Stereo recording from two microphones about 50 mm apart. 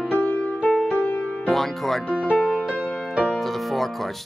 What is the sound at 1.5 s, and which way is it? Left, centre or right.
Speech, centre.